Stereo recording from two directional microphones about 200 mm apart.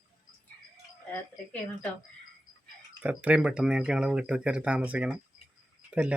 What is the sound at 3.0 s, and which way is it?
Speech, 5° right (ahead or behind).